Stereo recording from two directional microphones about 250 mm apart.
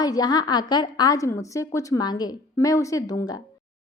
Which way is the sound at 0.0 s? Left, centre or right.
Centre.